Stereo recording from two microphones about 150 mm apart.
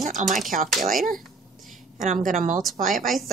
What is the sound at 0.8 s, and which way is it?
Speech, 70° right (ahead or behind).